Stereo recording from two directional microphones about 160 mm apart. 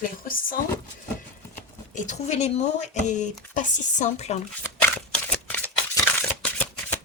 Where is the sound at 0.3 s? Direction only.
60° left (ahead or behind).